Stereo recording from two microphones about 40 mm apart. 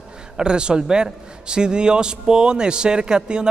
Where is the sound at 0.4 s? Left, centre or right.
Right.